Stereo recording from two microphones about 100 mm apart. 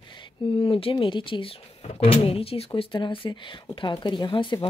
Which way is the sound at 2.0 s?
70° left (ahead or behind).